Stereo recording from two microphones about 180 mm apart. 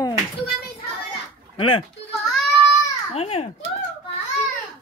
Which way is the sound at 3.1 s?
35° left (ahead or behind).